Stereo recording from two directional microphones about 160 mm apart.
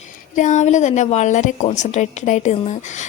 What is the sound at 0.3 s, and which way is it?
Speech, 50° left (ahead or behind).